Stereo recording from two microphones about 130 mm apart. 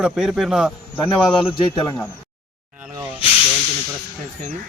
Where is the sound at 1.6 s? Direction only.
35° left (ahead or behind).